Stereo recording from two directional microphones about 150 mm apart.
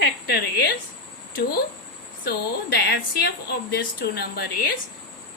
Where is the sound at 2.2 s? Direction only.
90° left.